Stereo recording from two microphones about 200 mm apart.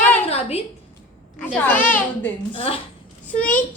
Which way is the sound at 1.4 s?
10° left (ahead or behind).